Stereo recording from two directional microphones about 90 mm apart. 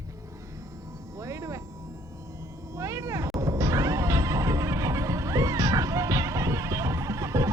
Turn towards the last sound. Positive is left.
turn(degrees=-35)  # may be behind; listen again after turning